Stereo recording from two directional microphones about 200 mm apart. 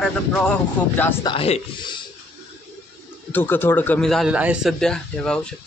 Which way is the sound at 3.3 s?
10° left (ahead or behind).